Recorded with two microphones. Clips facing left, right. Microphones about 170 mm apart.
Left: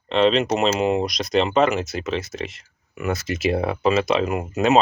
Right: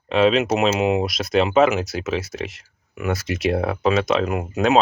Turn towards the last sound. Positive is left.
turn(degrees=0)  # may be behind; listen again after turning